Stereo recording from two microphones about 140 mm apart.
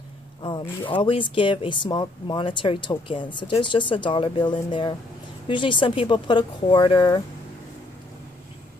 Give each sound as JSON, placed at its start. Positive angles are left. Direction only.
{"t": 0.4, "sound": "speech", "side_deg": 35}